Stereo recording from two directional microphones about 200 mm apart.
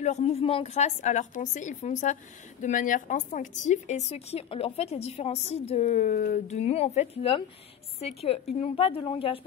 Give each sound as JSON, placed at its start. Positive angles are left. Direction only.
{"t": 0.0, "sound": "a woman's voice", "side_deg": 35}